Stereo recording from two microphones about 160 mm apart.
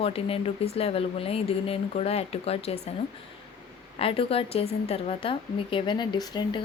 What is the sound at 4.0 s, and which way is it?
A woman's voice, 35° left (ahead or behind).